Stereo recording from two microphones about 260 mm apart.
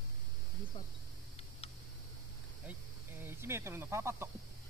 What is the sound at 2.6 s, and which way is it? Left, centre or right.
Speech, centre.